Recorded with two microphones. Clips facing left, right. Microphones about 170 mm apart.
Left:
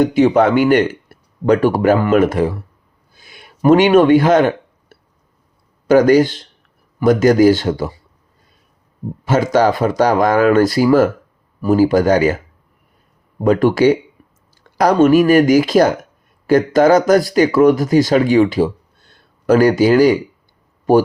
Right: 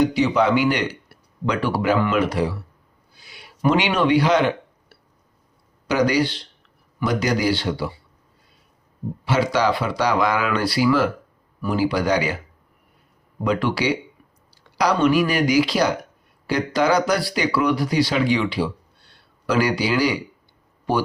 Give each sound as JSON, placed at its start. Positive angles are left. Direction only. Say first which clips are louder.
{"t": 0.0, "sound": "speech", "louder": "left 6 dB", "side_deg": 50}
{"t": 3.2, "sound": "a sound", "louder": "left 6 dB", "side_deg": 50}
{"t": 5.9, "sound": "speech", "louder": "left 9 dB", "side_deg": 45}
{"t": 9.2, "sound": "speech", "louder": "left 6 dB", "side_deg": 45}
{"t": 13.4, "sound": "speech", "louder": "left 10 dB", "side_deg": 45}